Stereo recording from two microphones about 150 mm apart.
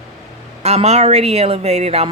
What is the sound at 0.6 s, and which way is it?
Speech, 45° right (ahead or behind).